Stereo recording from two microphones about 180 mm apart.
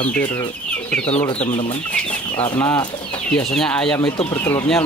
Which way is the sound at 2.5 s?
15° left (ahead or behind).